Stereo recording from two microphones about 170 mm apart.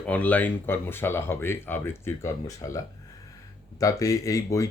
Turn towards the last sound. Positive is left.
turn(degrees=20)  # may be behind; listen again after turning